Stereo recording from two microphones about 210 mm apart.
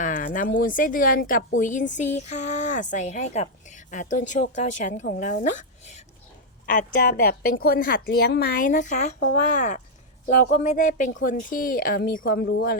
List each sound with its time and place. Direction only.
0.0 s a woman's voice: 40° left (ahead or behind)